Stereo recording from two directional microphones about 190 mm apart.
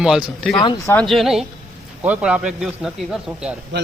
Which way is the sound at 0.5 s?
25° left (ahead or behind).